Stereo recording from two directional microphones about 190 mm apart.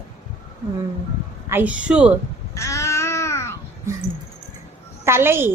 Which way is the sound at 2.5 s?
15° left (ahead or behind).